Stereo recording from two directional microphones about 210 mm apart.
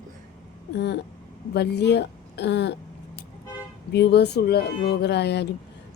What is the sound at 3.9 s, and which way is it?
Speech, 50° left (ahead or behind).